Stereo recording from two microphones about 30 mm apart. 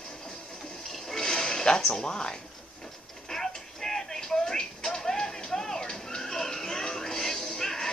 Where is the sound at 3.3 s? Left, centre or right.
Centre.